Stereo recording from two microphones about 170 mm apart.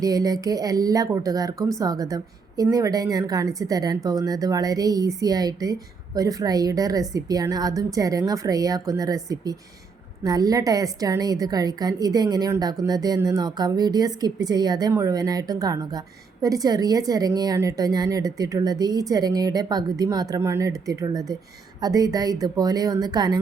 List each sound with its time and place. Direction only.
0.0 s a woman's voice: 20° right (ahead or behind)